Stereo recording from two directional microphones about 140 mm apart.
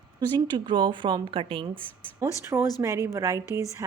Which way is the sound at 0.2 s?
30° right (ahead or behind).